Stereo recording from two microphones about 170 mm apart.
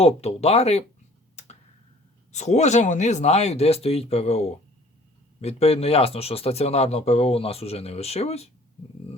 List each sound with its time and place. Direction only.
0.0 s speech: 35° left (ahead or behind)
2.3 s speech: 40° left (ahead or behind)